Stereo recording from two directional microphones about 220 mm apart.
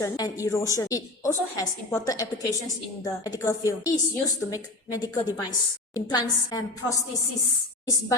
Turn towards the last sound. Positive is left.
turn(degrees=20)  # may be behind; listen again after turning